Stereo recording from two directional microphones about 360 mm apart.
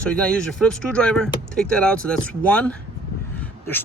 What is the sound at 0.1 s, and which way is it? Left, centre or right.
Speech, centre.